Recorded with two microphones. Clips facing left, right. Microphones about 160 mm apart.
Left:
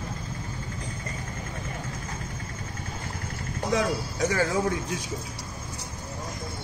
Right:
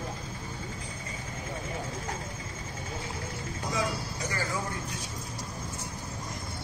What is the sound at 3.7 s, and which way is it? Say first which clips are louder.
Vehicle: left 6 dB; 80° left.